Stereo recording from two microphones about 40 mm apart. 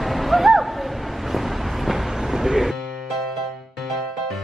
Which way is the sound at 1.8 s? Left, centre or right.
Centre.